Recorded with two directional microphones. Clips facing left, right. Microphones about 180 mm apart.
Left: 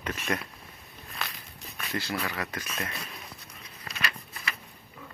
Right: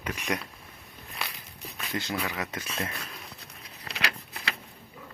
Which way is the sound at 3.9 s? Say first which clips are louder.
Right 2 dB; 75° right (ahead or behind).